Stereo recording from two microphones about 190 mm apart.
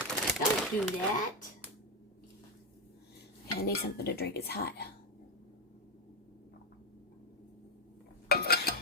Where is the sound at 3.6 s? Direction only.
55° left (ahead or behind).